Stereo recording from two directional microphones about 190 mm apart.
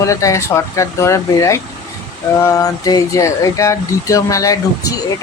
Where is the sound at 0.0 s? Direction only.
15° left (ahead or behind).